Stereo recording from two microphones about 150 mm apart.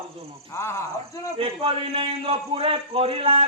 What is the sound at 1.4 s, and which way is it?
A man's voice, 40° right (ahead or behind).